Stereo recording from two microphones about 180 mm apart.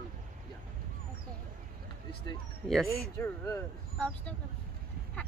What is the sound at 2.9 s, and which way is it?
Speech, 15° left (ahead or behind).